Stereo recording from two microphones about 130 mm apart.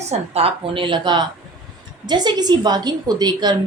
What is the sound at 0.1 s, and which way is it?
A woman's voice, 50° right (ahead or behind).